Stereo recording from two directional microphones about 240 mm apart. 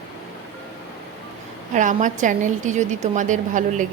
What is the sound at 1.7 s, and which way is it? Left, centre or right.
A woman's voice, right.